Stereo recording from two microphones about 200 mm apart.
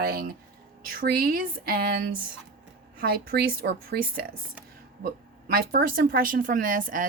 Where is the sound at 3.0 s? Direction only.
50° right (ahead or behind).